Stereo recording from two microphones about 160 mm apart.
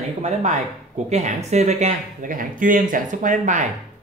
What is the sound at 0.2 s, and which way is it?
Speech, 50° right (ahead or behind).